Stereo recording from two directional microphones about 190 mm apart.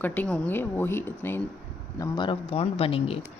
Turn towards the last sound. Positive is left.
turn(degrees=30)  # may be behind; listen again after turning